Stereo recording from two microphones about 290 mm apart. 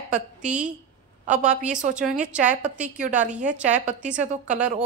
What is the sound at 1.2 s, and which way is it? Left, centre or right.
Speech, right.